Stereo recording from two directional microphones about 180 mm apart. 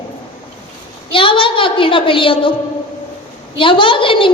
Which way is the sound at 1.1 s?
30° left (ahead or behind).